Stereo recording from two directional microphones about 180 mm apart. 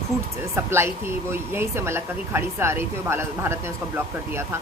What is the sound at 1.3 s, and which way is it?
Speech, 15° right (ahead or behind).